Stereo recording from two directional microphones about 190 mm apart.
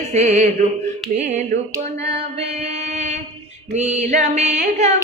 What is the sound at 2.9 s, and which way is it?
Music, 40° right (ahead or behind).